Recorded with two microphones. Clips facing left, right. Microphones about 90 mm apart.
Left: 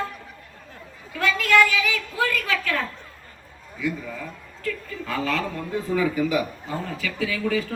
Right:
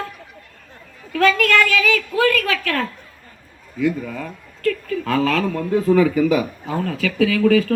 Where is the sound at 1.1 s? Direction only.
70° right (ahead or behind).